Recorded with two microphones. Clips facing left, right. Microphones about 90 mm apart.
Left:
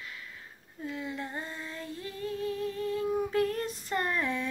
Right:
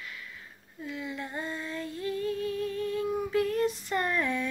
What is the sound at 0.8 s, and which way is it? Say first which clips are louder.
Female singing: even; 35° left (ahead or behind).